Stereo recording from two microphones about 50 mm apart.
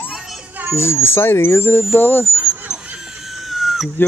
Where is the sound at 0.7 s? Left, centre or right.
Left.